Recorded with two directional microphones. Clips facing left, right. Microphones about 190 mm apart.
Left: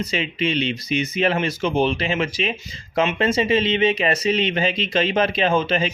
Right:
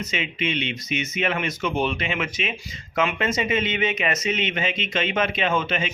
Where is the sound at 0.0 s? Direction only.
35° left (ahead or behind).